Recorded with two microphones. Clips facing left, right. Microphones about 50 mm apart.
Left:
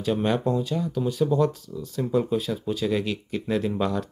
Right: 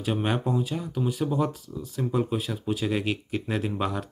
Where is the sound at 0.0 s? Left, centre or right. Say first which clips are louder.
Left 3 dB; centre.